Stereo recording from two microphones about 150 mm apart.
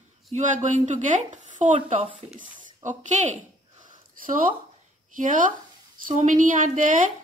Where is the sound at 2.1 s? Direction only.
10° right (ahead or behind).